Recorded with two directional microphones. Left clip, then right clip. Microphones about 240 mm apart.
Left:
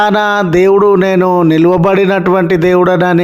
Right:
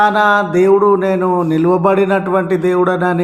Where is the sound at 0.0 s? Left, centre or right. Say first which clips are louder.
Left 1 dB; left.